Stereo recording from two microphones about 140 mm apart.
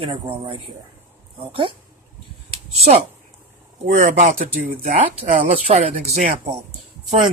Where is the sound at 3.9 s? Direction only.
60° right (ahead or behind).